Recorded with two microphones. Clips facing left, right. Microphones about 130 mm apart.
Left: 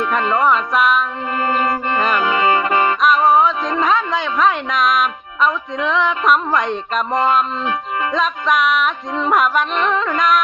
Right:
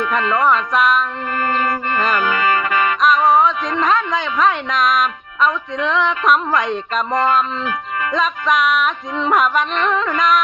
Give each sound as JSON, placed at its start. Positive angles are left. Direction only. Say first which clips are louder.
{"t": 0.2, "sound": "music", "louder": "even", "side_deg": 25}
{"t": 0.4, "sound": "music", "louder": "right 1 dB", "side_deg": 0}
{"t": 1.4, "sound": "music", "louder": "left 1 dB", "side_deg": 20}
{"t": 3.0, "sound": "a woman's voice", "louder": "right 1 dB", "side_deg": 0}
{"t": 8.1, "sound": "music", "louder": "right 1 dB", "side_deg": 0}